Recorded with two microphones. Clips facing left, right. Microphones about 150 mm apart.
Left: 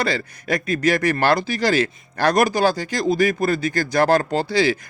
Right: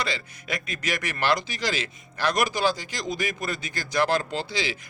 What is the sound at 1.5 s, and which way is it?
Speech, 55° left (ahead or behind).